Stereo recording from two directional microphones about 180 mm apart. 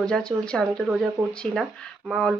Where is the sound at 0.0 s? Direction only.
5° left (ahead or behind).